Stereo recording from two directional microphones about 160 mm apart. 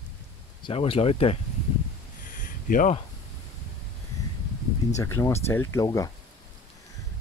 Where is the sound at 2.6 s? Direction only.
55° left (ahead or behind).